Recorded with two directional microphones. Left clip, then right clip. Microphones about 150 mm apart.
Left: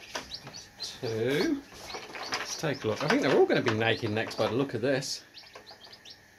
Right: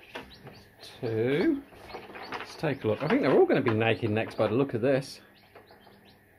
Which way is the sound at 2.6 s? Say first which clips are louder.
Right 4 dB; 25° right (ahead or behind).